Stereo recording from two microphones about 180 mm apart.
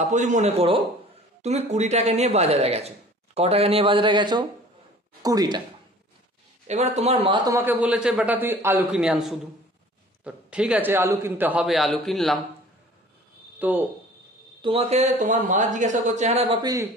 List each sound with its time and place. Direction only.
0.1 s speech: 40° right (ahead or behind); by 5.6 s 20° right (ahead or behind)
6.7 s a man's voice: 35° right (ahead or behind); by 12.4 s centre (ahead or behind)
13.6 s speech: 10° right (ahead or behind)
14.6 s speech: 30° right (ahead or behind)